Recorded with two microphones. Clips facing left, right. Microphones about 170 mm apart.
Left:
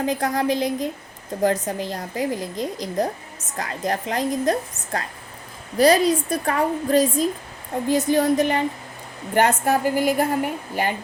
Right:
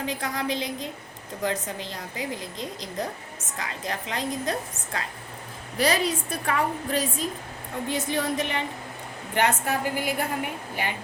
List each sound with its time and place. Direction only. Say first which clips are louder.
0.0 s a woman's voice: left 7 dB; 45° left (ahead or behind)